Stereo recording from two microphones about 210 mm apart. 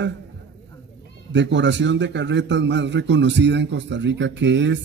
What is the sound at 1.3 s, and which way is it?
A man's voice, 60° right (ahead or behind).